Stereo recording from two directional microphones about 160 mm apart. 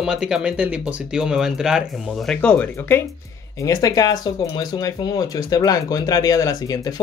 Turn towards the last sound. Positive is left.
turn(degrees=20)  # may be behind; listen again after turning